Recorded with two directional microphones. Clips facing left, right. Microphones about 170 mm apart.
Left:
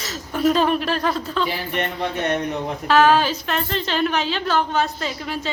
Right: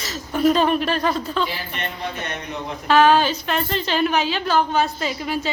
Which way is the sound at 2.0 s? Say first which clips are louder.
Left 8 dB; 55° left (ahead or behind).